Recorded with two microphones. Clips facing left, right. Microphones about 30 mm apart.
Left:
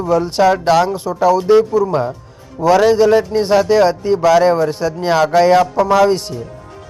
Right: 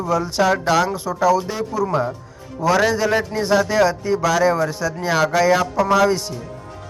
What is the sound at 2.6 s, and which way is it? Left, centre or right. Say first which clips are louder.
Speech: left 6 dB; left.